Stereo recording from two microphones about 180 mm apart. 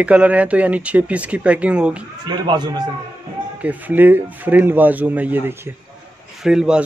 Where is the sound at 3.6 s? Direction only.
10° right (ahead or behind).